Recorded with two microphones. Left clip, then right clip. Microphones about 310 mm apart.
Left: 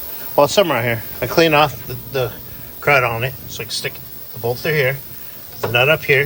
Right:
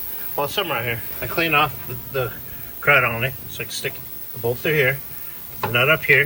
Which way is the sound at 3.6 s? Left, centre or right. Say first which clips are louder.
Left 4 dB; left.